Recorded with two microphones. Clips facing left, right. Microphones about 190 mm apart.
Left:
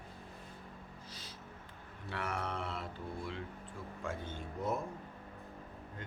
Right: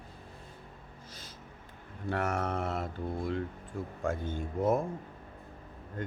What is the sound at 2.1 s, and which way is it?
Speech, 45° right (ahead or behind).